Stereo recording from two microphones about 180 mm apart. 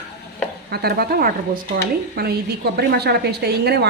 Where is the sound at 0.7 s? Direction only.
60° right (ahead or behind).